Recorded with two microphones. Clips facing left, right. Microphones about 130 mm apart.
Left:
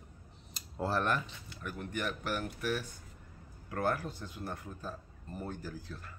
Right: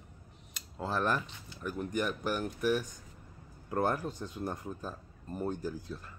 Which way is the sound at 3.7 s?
20° right (ahead or behind).